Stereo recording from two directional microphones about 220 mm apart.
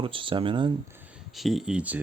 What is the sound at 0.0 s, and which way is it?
Speech, 25° right (ahead or behind).